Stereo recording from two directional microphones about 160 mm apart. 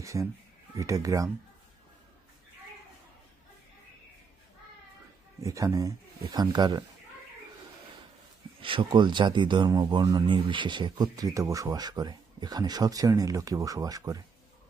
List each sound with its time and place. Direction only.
0.0 s speech: 20° right (ahead or behind)
5.4 s speech: 20° right (ahead or behind)
8.5 s speech: 30° right (ahead or behind)